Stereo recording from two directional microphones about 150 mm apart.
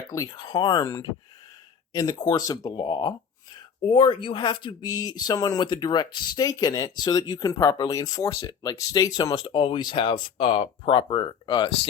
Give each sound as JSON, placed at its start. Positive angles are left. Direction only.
{"t": 0.1, "sound": "speech", "side_deg": 25}